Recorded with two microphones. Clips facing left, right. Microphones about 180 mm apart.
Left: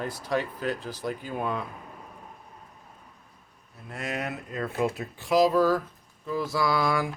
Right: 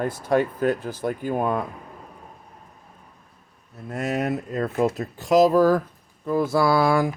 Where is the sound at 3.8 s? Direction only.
45° right (ahead or behind).